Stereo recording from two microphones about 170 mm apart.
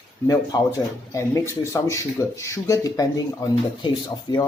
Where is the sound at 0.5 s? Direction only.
20° left (ahead or behind).